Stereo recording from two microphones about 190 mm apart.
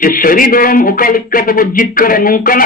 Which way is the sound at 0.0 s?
50° left (ahead or behind).